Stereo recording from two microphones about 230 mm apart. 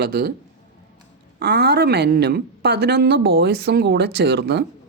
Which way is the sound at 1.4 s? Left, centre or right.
Right.